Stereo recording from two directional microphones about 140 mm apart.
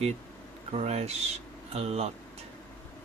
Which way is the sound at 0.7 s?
50° right (ahead or behind).